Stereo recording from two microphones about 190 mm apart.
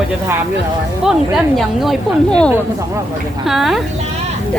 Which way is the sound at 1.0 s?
Centre (ahead or behind).